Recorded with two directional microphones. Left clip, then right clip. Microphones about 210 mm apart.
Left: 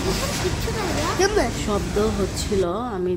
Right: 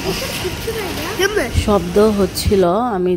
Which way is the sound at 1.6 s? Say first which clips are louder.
Right 9 dB; 35° right (ahead or behind).